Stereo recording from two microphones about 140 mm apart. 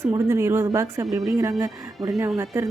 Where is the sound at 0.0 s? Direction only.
20° right (ahead or behind).